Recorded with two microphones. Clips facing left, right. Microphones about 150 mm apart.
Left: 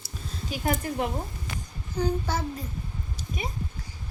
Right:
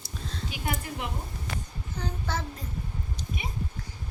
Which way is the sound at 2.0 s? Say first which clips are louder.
Left 7 dB; 10° left (ahead or behind).